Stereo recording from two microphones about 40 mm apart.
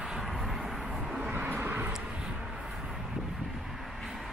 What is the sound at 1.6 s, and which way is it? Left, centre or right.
Vehicle, right.